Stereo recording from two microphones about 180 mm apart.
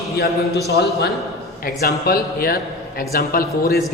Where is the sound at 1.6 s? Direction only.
55° left (ahead or behind).